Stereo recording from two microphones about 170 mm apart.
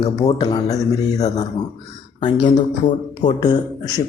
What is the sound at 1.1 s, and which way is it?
Speech, 40° left (ahead or behind).